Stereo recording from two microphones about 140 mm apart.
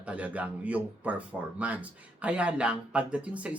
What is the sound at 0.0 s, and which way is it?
Speech, 10° right (ahead or behind).